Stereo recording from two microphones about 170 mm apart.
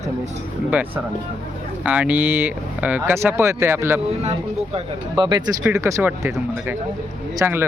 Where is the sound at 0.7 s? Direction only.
10° right (ahead or behind).